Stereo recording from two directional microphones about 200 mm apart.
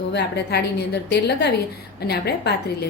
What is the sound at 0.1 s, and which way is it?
A woman's voice, 55° left (ahead or behind).